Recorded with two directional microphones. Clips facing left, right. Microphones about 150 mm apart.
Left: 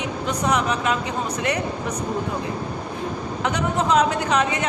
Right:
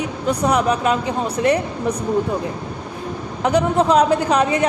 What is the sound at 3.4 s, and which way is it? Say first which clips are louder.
Speech: right 7 dB; 35° right (ahead or behind).